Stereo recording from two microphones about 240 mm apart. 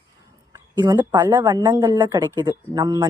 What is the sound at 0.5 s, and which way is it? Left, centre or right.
Speech, centre.